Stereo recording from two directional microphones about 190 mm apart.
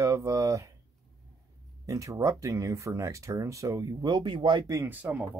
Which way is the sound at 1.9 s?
15° right (ahead or behind).